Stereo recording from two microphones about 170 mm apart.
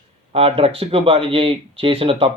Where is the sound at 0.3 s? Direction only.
35° right (ahead or behind).